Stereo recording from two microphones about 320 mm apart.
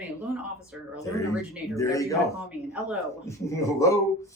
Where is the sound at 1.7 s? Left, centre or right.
Centre.